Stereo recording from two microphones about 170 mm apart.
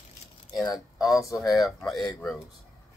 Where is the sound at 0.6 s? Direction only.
Centre (ahead or behind).